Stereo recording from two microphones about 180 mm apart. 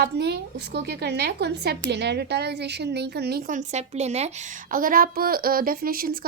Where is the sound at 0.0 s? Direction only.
65° right (ahead or behind); by 4.3 s 35° right (ahead or behind).